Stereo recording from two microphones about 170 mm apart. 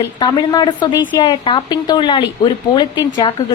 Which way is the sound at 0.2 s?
25° left (ahead or behind).